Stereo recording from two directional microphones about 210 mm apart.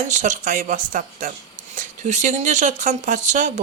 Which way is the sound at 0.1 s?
35° right (ahead or behind).